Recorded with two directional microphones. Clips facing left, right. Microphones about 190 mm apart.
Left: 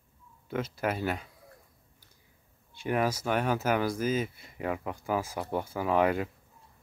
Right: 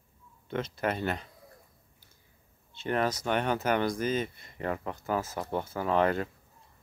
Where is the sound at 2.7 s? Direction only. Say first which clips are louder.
Left 1 dB; 10° left (ahead or behind).